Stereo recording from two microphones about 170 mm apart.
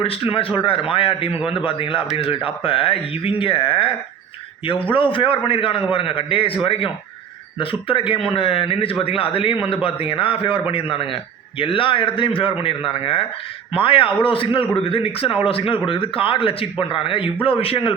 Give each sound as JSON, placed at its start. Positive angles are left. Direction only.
{"t": 0.0, "sound": "a man's voice", "side_deg": 35}